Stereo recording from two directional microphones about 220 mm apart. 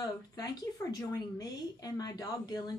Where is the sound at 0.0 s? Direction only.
15° left (ahead or behind).